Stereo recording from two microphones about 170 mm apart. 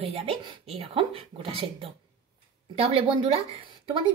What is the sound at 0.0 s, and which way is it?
A woman's voice, 35° right (ahead or behind).